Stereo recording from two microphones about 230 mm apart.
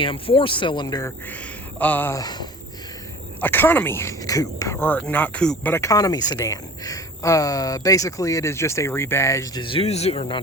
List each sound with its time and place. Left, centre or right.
0.0 s speech: left